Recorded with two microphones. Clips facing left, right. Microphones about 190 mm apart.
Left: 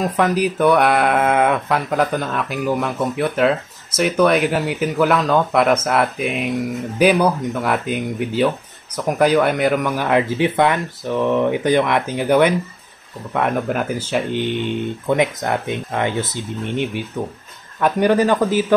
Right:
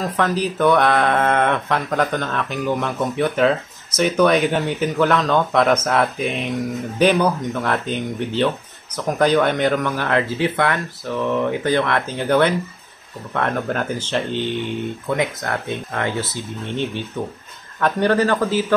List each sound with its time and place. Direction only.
0.0 s speech: 15° left (ahead or behind)